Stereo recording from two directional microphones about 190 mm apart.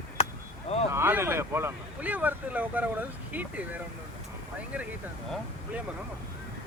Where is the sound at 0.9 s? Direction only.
10° right (ahead or behind).